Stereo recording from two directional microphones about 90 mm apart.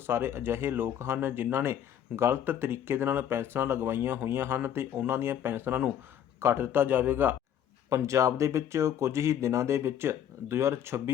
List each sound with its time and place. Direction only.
0.1 s speech: 30° right (ahead or behind)
7.9 s speech: 35° right (ahead or behind)